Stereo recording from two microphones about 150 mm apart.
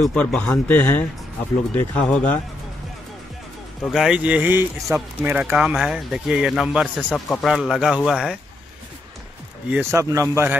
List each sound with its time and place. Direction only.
0.0 s speech: 5° left (ahead or behind)
3.8 s speech: centre (ahead or behind)
9.7 s speech: 15° right (ahead or behind)